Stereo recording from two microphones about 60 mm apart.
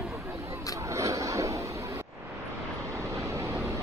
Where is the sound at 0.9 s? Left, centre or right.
Right.